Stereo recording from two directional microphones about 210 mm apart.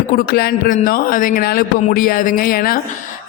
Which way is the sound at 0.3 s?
45° left (ahead or behind).